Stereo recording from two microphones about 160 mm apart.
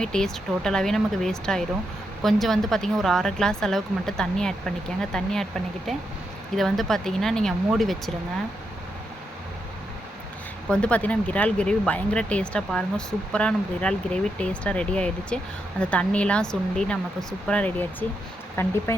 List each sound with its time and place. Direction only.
0.0 s speech: 5° left (ahead or behind)
10.7 s speech: 5° left (ahead or behind)